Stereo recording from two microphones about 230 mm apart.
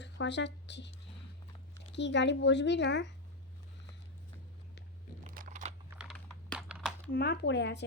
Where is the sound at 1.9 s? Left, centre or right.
Left.